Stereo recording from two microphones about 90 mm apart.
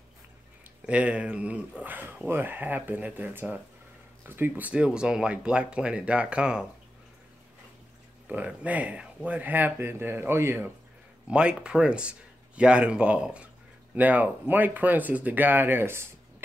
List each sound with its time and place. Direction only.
0.8 s speech: 15° right (ahead or behind)
8.3 s speech: 15° right (ahead or behind)
11.2 s speech: 10° right (ahead or behind); by 16.4 s 25° right (ahead or behind)